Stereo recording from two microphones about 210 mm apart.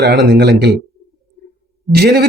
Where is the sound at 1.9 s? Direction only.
50° right (ahead or behind).